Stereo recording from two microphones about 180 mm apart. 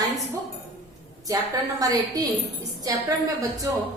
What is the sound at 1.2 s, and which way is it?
A woman's voice, 20° right (ahead or behind).